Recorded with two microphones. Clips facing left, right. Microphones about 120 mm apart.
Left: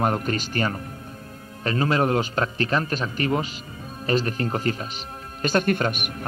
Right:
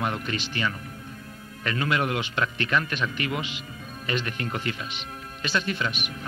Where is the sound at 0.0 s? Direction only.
40° left (ahead or behind).